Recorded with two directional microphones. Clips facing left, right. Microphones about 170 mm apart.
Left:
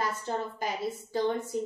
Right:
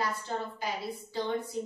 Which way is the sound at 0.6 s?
45° left (ahead or behind).